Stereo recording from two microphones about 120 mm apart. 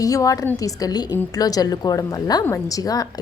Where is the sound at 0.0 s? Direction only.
30° left (ahead or behind).